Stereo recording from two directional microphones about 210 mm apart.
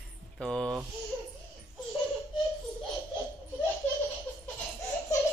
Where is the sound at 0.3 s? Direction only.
5° left (ahead or behind).